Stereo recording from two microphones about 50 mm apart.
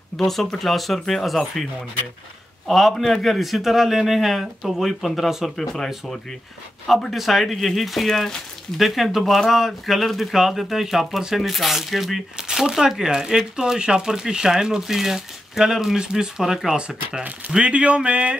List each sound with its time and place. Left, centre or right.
0.2 s speech: centre
2.7 s speech: centre
7.1 s speech: centre; by 18.3 s right